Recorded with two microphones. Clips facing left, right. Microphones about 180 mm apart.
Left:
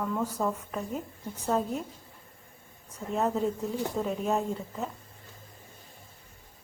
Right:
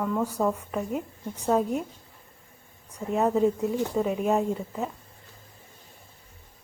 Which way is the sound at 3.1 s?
Centre (ahead or behind).